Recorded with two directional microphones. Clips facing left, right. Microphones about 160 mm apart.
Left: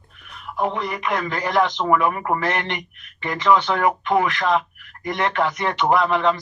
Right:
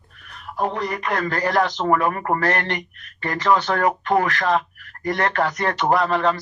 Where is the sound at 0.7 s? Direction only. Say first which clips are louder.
Right 1 dB; 40° right (ahead or behind).